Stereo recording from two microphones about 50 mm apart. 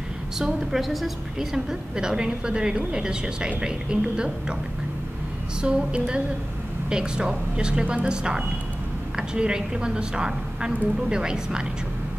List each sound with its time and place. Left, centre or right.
0.4 s a woman's voice: centre
5.6 s a woman's voice: centre